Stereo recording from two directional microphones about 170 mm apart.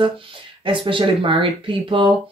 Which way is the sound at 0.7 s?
30° right (ahead or behind).